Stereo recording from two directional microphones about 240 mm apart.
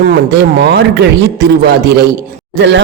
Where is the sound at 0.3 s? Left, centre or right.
Right.